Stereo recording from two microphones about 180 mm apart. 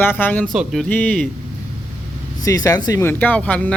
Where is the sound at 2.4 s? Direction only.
20° left (ahead or behind).